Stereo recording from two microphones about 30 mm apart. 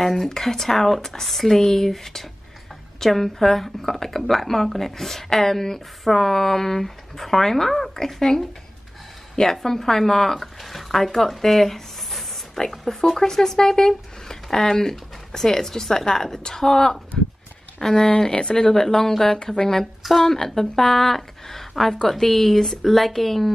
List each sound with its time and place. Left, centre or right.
0.0 s speech: centre
18.3 s speech: left
18.6 s speech: centre
20.0 s speech: centre
20.3 s speech: centre